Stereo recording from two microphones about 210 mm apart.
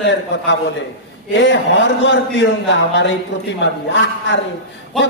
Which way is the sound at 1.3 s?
60° left (ahead or behind).